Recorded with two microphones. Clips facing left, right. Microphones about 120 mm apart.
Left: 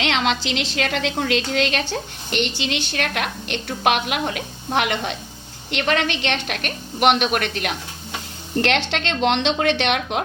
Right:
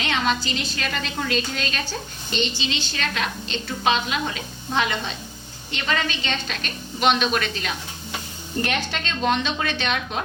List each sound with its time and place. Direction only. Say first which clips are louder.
0.0 s a woman's voice: left 2 dB; 90° left; by 7.8 s 65° left (ahead or behind)
8.6 s a woman's voice: left 6 dB; 85° left; by 10.2 s 70° left (ahead or behind)